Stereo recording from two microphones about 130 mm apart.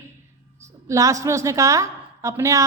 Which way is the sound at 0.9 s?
25° right (ahead or behind).